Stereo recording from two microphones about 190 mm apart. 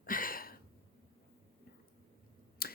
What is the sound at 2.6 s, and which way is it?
Tick-tock, 50° left (ahead or behind).